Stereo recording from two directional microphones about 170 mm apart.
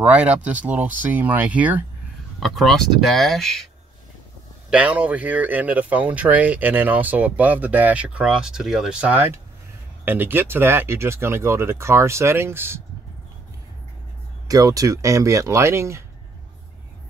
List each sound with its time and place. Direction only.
0.0 s speech: 5° right (ahead or behind)
2.4 s speech: centre (ahead or behind)
4.6 s speech: 10° right (ahead or behind)
14.5 s speech: 20° right (ahead or behind)